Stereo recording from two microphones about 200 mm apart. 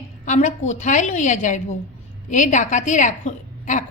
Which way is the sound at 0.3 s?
35° left (ahead or behind).